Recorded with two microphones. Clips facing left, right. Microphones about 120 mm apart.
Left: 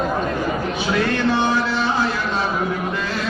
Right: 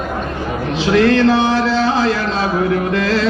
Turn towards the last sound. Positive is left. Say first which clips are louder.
# right 8 dB
turn(degrees=-90)